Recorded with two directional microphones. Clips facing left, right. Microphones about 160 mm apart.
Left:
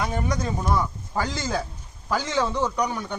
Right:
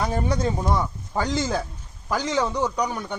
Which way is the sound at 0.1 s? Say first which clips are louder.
Right 3 dB; 30° right (ahead or behind).